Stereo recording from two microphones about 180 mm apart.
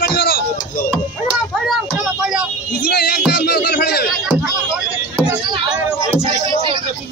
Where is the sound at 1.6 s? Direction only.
5° right (ahead or behind).